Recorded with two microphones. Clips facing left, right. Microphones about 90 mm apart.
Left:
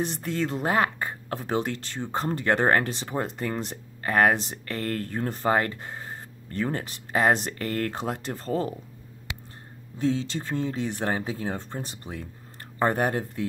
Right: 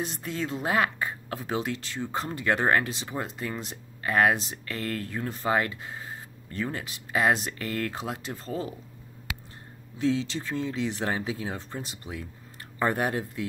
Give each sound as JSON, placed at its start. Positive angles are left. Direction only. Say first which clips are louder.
{"t": 0.1, "sound": "speech", "louder": "left 4 dB", "side_deg": 50}
{"t": 9.9, "sound": "speech", "louder": "even", "side_deg": 45}